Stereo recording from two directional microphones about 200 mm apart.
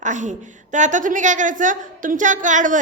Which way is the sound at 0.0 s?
40° right (ahead or behind).